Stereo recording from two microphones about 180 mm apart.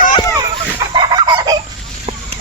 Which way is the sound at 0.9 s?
25° right (ahead or behind).